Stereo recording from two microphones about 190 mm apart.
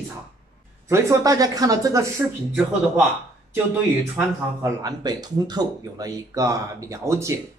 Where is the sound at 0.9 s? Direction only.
15° right (ahead or behind).